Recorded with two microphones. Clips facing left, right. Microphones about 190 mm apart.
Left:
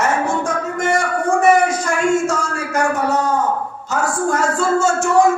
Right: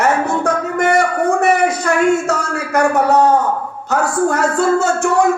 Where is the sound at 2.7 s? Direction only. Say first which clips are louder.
Right 5 dB; 60° right (ahead or behind).